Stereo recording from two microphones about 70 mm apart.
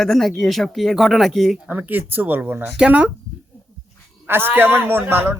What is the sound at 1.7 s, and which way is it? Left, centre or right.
Speech, right.